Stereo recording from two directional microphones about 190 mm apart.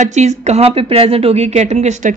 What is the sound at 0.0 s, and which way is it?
A woman's voice, 35° right (ahead or behind).